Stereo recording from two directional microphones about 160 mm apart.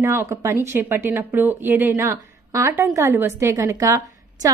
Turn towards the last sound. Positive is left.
turn(degrees=-20)  # may be behind; listen again after turning